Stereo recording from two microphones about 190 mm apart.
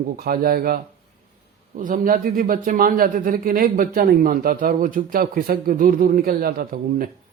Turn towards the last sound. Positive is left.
turn(degrees=-50)  # may be behind; listen again after turning